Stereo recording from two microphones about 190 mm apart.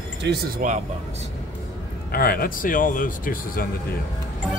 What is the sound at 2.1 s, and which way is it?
Speech, 50° left (ahead or behind).